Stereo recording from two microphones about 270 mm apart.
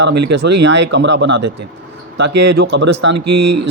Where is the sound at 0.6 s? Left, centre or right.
Right.